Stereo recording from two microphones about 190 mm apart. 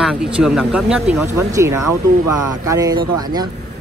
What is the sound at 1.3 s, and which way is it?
Speech, 15° right (ahead or behind).